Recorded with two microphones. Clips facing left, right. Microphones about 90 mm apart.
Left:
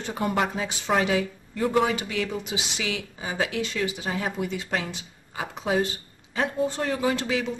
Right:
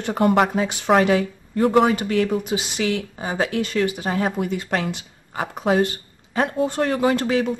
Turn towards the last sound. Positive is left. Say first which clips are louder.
# right 6 dB
turn(degrees=-50)  # may be behind; listen again after turning